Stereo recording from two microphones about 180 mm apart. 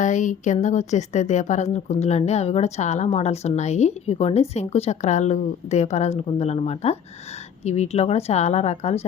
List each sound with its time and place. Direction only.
0.0 s a woman's voice: 45° left (ahead or behind)